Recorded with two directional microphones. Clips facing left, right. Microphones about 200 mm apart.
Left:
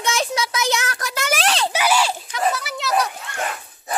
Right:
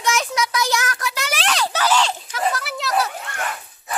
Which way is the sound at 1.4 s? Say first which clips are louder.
Even; 30° left (ahead or behind).